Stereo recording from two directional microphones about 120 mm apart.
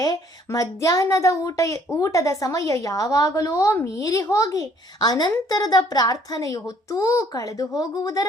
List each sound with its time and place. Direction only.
0.0 s speech: 30° left (ahead or behind)